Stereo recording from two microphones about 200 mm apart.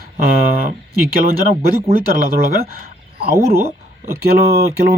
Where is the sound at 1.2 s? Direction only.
45° right (ahead or behind).